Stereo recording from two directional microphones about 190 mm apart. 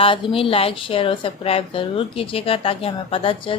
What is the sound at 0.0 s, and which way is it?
A woman's voice, 30° left (ahead or behind).